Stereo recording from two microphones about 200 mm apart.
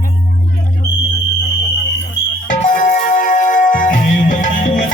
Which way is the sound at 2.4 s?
40° left (ahead or behind).